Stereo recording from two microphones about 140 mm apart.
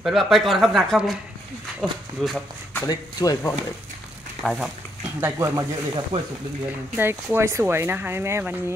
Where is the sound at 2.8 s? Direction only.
25° left (ahead or behind).